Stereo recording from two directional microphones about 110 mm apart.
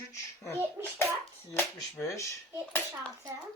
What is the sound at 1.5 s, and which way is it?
Speech, 25° left (ahead or behind).